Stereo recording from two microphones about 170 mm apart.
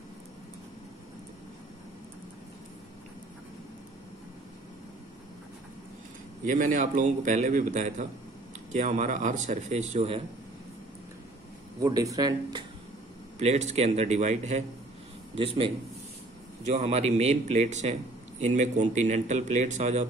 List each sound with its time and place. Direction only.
6.4 s a man's voice: 50° right (ahead or behind)
11.8 s speech: 20° right (ahead or behind)
13.4 s a man's voice: 40° right (ahead or behind)